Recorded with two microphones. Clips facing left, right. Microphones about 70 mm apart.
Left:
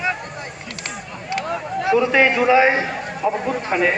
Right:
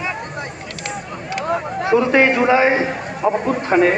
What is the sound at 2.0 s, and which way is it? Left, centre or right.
A man's voice, right.